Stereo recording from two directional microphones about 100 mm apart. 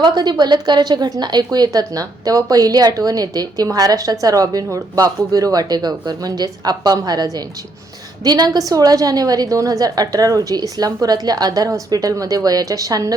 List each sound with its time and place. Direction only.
0.0 s a woman's voice: 45° right (ahead or behind)